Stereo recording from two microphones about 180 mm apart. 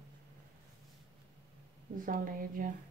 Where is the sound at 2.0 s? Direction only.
50° right (ahead or behind).